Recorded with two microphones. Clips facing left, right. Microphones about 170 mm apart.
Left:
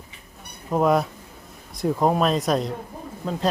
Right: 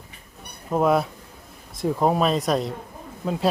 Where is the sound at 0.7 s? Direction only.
Centre (ahead or behind).